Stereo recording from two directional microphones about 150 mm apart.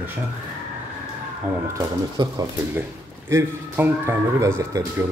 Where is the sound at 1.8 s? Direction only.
25° right (ahead or behind).